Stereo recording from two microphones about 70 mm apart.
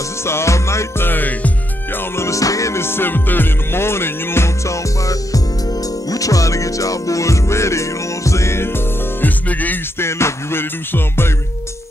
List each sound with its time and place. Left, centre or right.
0.2 s music: left
2.0 s music: left
9.5 s music: left
9.9 s music: left